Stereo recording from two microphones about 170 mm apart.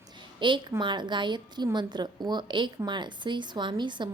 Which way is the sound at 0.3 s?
30° right (ahead or behind).